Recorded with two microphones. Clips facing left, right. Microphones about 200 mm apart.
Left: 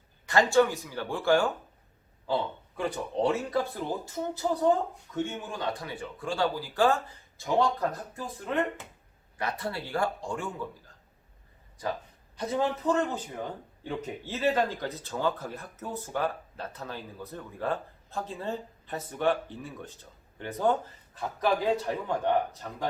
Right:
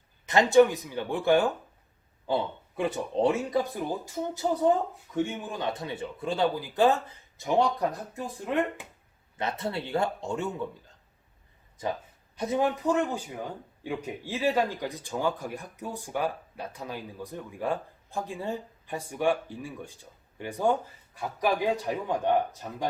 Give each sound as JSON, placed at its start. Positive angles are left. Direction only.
{"t": 0.3, "sound": "speech", "side_deg": -20}
{"t": 12.4, "sound": "speech", "side_deg": -15}